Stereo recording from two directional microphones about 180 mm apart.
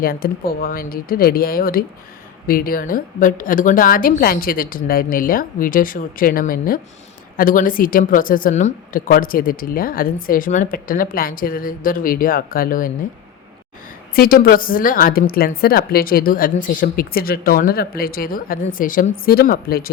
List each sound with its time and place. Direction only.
0.0 s a woman's voice: 55° left (ahead or behind)
14.2 s a woman's voice: 55° left (ahead or behind)